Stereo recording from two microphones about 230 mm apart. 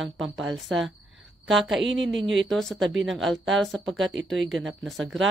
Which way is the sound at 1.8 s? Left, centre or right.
Right.